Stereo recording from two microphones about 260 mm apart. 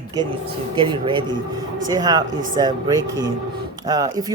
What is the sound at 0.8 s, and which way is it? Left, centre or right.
Speech, centre.